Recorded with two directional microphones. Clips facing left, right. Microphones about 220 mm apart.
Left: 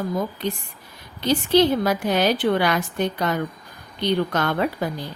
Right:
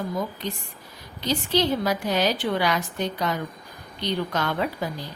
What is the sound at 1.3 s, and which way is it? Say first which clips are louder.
A woman's voice: left 6 dB; 55° left (ahead or behind).